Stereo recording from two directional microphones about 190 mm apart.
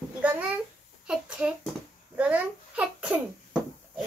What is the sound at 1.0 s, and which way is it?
A child's voice, 5° right (ahead or behind).